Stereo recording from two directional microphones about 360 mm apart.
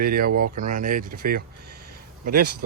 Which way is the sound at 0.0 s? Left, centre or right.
Right.